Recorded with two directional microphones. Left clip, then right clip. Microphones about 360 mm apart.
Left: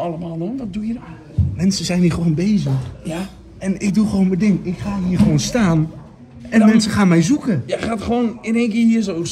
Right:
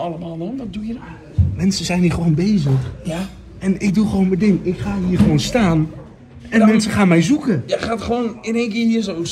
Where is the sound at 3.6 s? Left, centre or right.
Centre.